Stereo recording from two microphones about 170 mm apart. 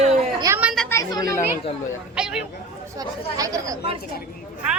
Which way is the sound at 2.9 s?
20° right (ahead or behind).